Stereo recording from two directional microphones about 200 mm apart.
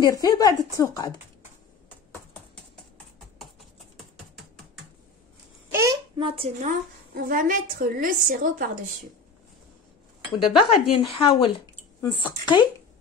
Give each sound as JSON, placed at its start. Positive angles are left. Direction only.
{"t": 0.0, "sound": "speech", "side_deg": 20}
{"t": 1.9, "sound": "a sound", "side_deg": 5}
{"t": 5.7, "sound": "babbling", "side_deg": -15}
{"t": 6.7, "sound": "a woman's voice", "side_deg": -45}
{"t": 10.7, "sound": "speech", "side_deg": 25}